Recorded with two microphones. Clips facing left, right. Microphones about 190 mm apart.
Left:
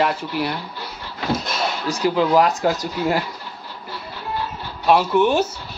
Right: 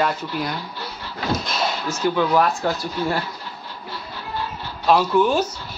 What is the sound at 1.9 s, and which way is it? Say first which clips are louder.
Speech: left 3 dB; 10° left (ahead or behind).